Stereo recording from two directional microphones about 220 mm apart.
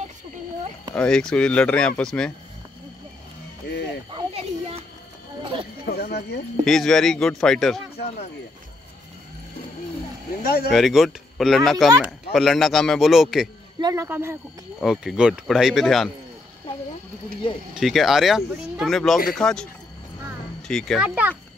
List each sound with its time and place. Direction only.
0.9 s speech: 5° left (ahead or behind)
3.6 s music: 50° left (ahead or behind)
4.1 s children playing: 25° right (ahead or behind)
5.4 s clip-clop: 25° right (ahead or behind)
5.9 s speech: 45° left (ahead or behind)
6.6 s speech: centre (ahead or behind)
10.4 s speech: 45° left (ahead or behind)
10.7 s speech: centre (ahead or behind)
13.7 s speech: 15° right (ahead or behind); by 16.1 s centre (ahead or behind)
17.7 s speech: centre (ahead or behind)